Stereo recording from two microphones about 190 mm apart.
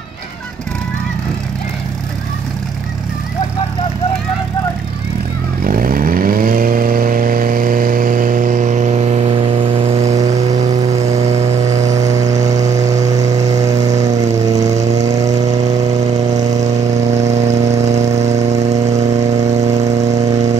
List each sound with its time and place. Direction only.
5.6 s vehicle: 50° right (ahead or behind)
11.9 s vehicle: 20° right (ahead or behind)
14.0 s a sound: 20° right (ahead or behind)
16.6 s vehicle: 35° right (ahead or behind)
17.6 s a sound: 35° right (ahead or behind)
19.8 s vehicle: 35° right (ahead or behind)